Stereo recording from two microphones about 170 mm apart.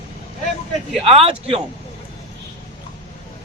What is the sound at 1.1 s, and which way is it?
Speech, 35° right (ahead or behind).